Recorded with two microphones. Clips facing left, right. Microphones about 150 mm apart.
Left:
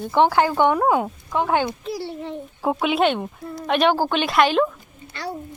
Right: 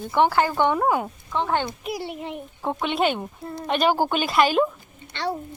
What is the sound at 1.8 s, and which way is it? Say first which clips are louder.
Speech: left 1 dB; 15° right (ahead or behind).